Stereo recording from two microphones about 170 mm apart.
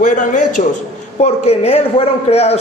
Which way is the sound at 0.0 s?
50° left (ahead or behind).